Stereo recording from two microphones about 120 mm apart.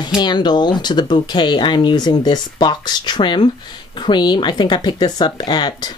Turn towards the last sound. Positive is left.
turn(degrees=35)  # may be behind; listen again after turning